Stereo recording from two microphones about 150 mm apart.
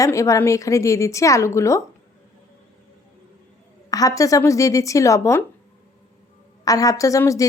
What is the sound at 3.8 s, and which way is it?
Speech, 25° left (ahead or behind).